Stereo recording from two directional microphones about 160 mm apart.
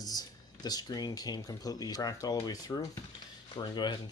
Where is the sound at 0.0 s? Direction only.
25° left (ahead or behind).